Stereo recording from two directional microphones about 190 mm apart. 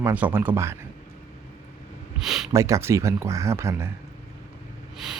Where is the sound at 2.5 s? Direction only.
15° right (ahead or behind).